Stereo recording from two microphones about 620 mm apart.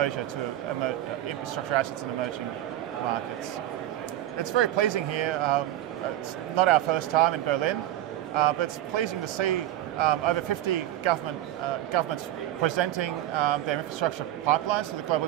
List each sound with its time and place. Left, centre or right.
1.7 s a man's voice: right
4.4 s a man's voice: right